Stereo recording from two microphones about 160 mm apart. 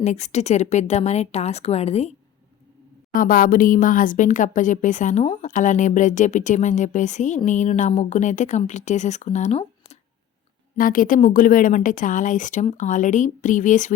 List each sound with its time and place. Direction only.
0.0 s speech: 45° left (ahead or behind)
3.1 s speech: 60° left (ahead or behind); by 10.0 s 45° left (ahead or behind)
10.8 s speech: 60° left (ahead or behind)